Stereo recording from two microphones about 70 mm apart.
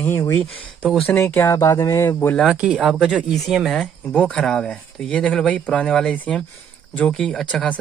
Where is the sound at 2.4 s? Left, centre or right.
Centre.